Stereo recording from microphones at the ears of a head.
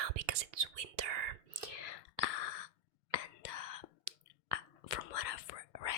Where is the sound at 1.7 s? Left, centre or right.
Left.